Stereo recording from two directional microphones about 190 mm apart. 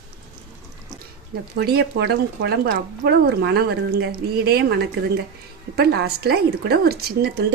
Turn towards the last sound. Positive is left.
turn(degrees=-55)  # may be behind; listen again after turning